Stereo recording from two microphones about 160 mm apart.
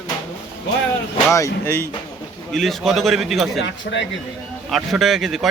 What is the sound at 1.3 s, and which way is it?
Speech, 20° left (ahead or behind).